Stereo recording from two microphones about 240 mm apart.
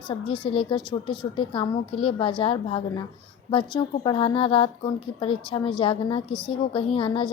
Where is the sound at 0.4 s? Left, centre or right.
Left.